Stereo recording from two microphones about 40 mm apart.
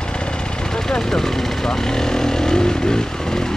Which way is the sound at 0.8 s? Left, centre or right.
Centre.